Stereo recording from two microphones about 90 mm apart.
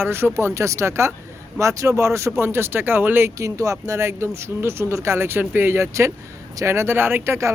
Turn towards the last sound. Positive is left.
turn(degrees=-30)  # may be behind; listen again after turning